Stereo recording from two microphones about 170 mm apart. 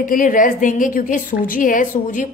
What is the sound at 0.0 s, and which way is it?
A woman's voice, 55° left (ahead or behind).